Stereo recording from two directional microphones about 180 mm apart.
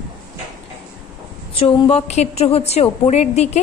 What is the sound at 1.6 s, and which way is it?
A woman's voice, 35° left (ahead or behind).